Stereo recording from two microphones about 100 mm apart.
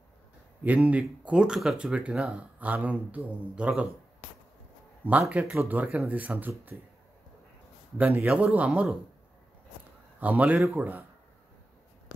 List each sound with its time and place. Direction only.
0.7 s speech: 15° right (ahead or behind)
5.3 s speech: 15° right (ahead or behind)
8.0 s speech: 15° right (ahead or behind)
10.2 s speech: 15° right (ahead or behind)